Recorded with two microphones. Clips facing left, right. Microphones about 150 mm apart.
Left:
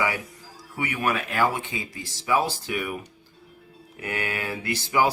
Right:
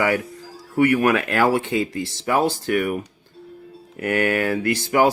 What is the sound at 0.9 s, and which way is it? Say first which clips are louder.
Speech: right 6 dB; 70° right (ahead or behind).